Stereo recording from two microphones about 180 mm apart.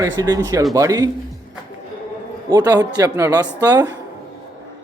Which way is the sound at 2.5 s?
25° right (ahead or behind).